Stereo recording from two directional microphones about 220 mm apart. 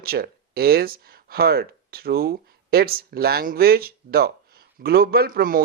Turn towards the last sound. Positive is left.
turn(degrees=-40)  # may be behind; listen again after turning